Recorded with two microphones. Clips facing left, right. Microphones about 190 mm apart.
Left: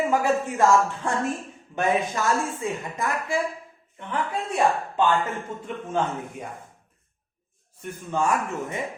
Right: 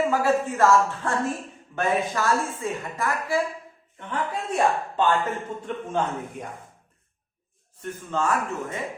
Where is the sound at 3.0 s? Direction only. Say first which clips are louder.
Right 2 dB; 20° left (ahead or behind).